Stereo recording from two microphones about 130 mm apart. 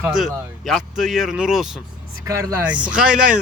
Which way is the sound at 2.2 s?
20° right (ahead or behind).